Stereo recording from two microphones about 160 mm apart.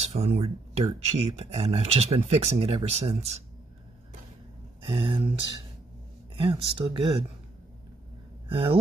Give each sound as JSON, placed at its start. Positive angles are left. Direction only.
{"t": 0.0, "sound": "speech", "side_deg": -40}
{"t": 4.8, "sound": "speech", "side_deg": -35}
{"t": 8.5, "sound": "speech", "side_deg": -35}